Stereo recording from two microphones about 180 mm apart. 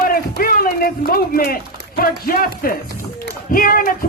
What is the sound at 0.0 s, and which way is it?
Speech, 55° left (ahead or behind).